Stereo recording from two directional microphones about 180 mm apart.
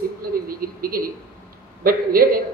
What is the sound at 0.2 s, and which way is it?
Television, 55° right (ahead or behind).